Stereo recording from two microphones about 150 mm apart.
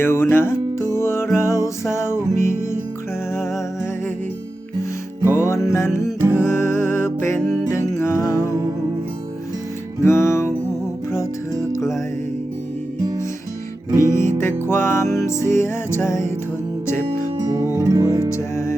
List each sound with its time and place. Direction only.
0.0 s music: 15° left (ahead or behind)
2.3 s music: 55° right (ahead or behind)
3.3 s music: 20° left (ahead or behind)
5.3 s music: 15° left (ahead or behind)
10.0 s music: 20° left (ahead or behind)
11.7 s music: 20° left (ahead or behind)
13.9 s music: 25° right (ahead or behind)
14.3 s music: 15° left (ahead or behind)
17.1 s music: 30° right (ahead or behind)
17.6 s music: 20° right (ahead or behind)
18.3 s music: 20° left (ahead or behind)